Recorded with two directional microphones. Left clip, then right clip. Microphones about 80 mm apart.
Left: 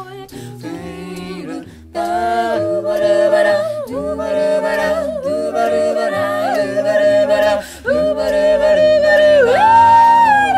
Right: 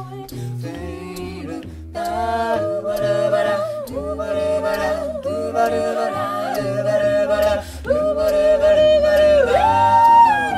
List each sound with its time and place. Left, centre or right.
1.5 s a capella: left
4.2 s music: left
6.5 s yodeling: left
8.8 s yodeling: left
9.1 s music: left